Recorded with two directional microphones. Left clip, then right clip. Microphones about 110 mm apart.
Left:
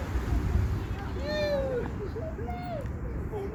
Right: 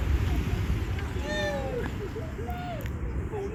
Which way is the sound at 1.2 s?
5° right (ahead or behind).